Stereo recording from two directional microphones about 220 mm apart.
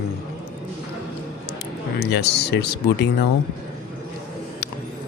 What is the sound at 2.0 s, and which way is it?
Speech, 50° left (ahead or behind).